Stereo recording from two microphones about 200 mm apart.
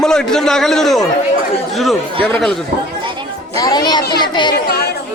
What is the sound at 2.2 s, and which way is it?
Speech, centre (ahead or behind).